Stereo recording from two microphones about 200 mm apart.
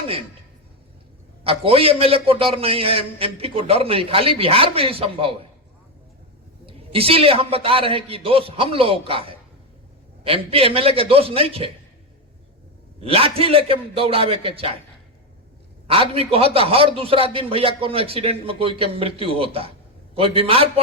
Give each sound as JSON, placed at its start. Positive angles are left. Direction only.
{"t": 1.5, "sound": "a man's voice", "side_deg": -30}
{"t": 6.7, "sound": "a man's voice", "side_deg": -30}
{"t": 13.0, "sound": "a man's voice", "side_deg": -30}
{"t": 15.9, "sound": "a man's voice", "side_deg": -30}